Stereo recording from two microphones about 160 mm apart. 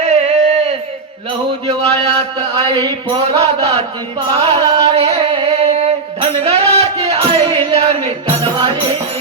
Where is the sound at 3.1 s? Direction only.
35° right (ahead or behind).